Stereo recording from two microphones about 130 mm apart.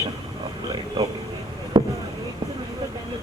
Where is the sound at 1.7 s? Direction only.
40° right (ahead or behind).